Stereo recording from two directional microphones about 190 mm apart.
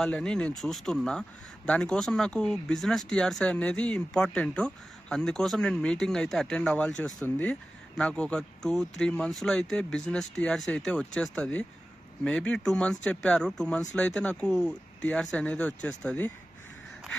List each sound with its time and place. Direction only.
0.0 s speech: 5° left (ahead or behind)